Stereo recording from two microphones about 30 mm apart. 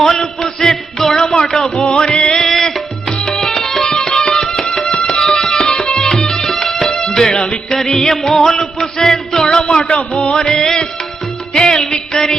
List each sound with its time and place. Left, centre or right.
0.0 s music: centre
2.4 s music: centre
3.1 s music: left
4.8 s music: left
7.3 s music: left
7.8 s music: centre
9.8 s a sound: left
10.2 s music: left